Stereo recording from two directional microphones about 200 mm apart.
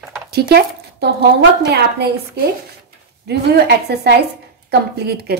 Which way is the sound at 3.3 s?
55° right (ahead or behind).